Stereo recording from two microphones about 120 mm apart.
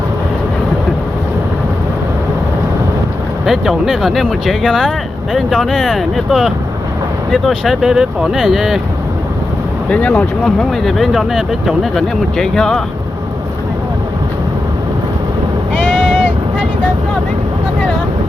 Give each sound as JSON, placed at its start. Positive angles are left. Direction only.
{"t": 3.4, "sound": "speech", "side_deg": 0}
{"t": 9.9, "sound": "speech", "side_deg": 5}
{"t": 15.9, "sound": "vehicle", "side_deg": -5}